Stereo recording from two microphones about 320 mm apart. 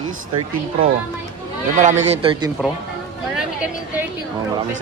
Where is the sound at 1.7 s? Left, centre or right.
Right.